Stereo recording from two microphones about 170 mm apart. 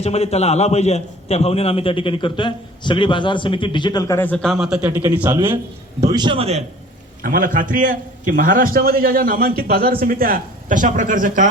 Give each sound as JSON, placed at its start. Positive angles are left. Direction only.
{"t": 0.0, "sound": "a man's voice", "side_deg": 40}
{"t": 6.1, "sound": "a man's voice", "side_deg": -25}
{"t": 7.2, "sound": "a man's voice", "side_deg": -55}